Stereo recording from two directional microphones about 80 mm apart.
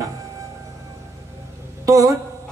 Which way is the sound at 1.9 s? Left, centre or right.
Right.